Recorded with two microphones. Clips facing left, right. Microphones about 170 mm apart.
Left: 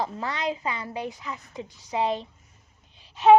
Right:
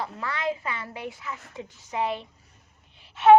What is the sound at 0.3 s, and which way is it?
A woman's voice, 20° left (ahead or behind).